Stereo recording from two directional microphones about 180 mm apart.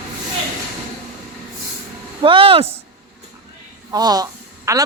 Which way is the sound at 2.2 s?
30° right (ahead or behind).